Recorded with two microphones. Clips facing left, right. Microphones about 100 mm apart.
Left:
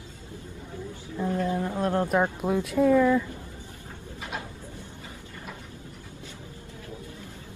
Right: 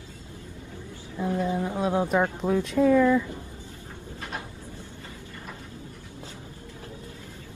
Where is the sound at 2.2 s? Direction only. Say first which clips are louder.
Right 1 dB; 10° left (ahead or behind).